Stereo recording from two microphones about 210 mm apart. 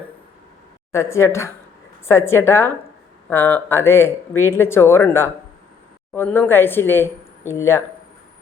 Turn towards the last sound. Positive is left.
turn(degrees=15)  # may be behind; listen again after turning